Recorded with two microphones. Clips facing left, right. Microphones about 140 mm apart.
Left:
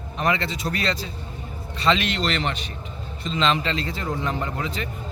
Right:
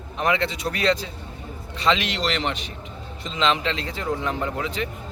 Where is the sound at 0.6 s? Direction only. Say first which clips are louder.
Right 3 dB; 10° right (ahead or behind).